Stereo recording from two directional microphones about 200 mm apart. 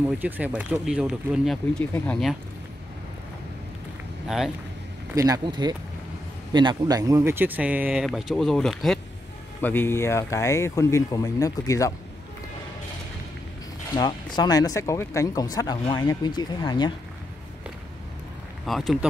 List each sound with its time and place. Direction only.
0.0 s speech: 5° right (ahead or behind)
5.1 s speech: 15° right (ahead or behind); by 11.9 s 15° left (ahead or behind)
13.9 s speech: 20° left (ahead or behind)
18.7 s speech: centre (ahead or behind)